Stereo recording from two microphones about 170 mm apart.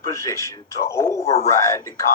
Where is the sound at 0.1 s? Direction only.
15° left (ahead or behind).